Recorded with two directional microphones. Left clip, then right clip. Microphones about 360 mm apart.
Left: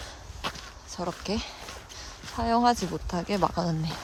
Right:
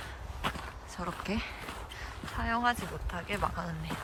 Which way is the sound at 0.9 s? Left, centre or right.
Centre.